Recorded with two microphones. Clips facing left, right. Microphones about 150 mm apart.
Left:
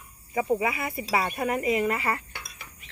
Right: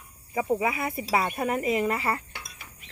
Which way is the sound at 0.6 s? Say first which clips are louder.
Right 1 dB; 30° right (ahead or behind).